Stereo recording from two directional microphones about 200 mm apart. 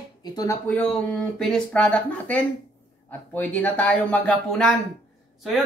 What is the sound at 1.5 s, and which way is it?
Speech, 5° left (ahead or behind).